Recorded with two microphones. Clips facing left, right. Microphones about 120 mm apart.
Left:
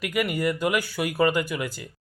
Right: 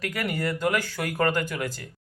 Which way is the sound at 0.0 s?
10° left (ahead or behind).